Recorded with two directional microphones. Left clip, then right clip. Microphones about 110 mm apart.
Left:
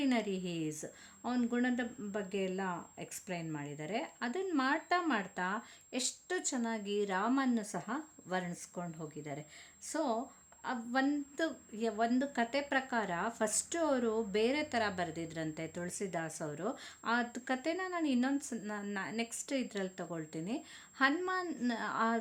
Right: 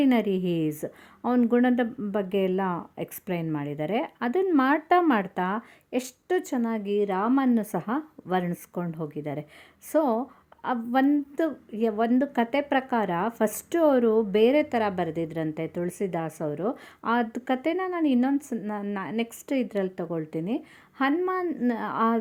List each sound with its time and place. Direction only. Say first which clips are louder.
0.0 s a woman's voice: right 11 dB; 55° right (ahead or behind); by 0.9 s 70° right (ahead or behind)
1.2 s speech: right 12 dB; 55° right (ahead or behind)
7.6 s a woman's voice: right 11 dB; 60° right (ahead or behind); by 18.5 s 40° right (ahead or behind)
18.7 s a woman's voice: right 7 dB; 30° right (ahead or behind)